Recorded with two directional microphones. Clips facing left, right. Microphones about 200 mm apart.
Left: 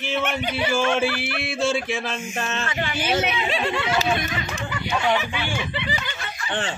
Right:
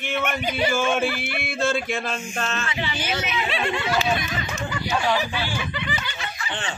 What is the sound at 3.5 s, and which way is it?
Speech, 40° left (ahead or behind).